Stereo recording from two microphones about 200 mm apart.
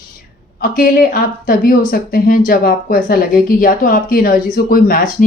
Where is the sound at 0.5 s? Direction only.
45° left (ahead or behind).